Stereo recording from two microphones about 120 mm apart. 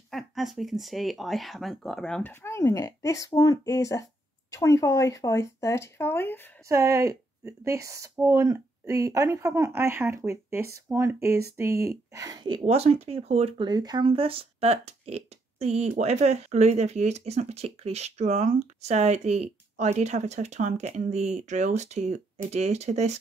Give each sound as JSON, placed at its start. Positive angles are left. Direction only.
{"t": 0.1, "sound": "speech", "side_deg": 0}
{"t": 2.4, "sound": "speech", "side_deg": 25}
{"t": 6.7, "sound": "a woman's voice", "side_deg": -25}
{"t": 12.6, "sound": "speech", "side_deg": -60}
{"t": 13.6, "sound": "speech", "side_deg": -35}